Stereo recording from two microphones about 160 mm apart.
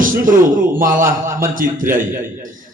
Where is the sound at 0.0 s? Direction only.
55° right (ahead or behind).